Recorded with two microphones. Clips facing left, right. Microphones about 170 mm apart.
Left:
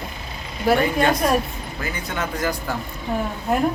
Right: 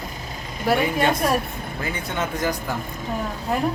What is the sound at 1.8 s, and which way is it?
Speech, 25° right (ahead or behind).